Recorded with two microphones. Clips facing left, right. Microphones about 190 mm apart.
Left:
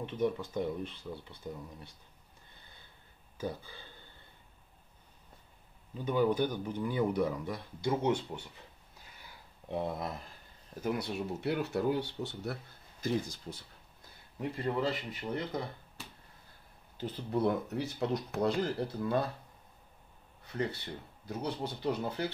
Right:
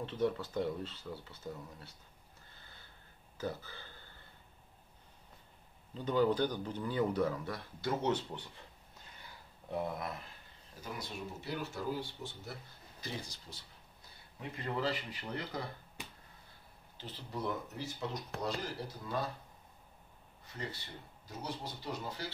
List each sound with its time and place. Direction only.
0.0 s speech: 15° left (ahead or behind)
2.5 s snort: 20° left (ahead or behind)
3.3 s speech: 15° left (ahead or behind)
5.9 s speech: 10° left (ahead or behind)
9.7 s speech: 25° left (ahead or behind)
10.8 s speech: 60° left (ahead or behind)
13.0 s speech: 50° left (ahead or behind)
14.6 s speech: 25° left (ahead or behind)
16.9 s speech: 55° left (ahead or behind)
21.3 s speech: 60° left (ahead or behind)